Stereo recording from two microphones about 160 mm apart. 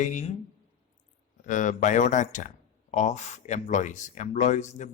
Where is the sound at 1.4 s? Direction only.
50° left (ahead or behind).